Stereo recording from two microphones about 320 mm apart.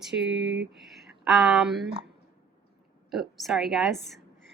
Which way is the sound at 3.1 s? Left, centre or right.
Centre.